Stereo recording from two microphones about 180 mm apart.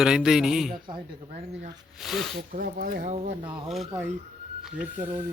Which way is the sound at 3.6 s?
5° right (ahead or behind).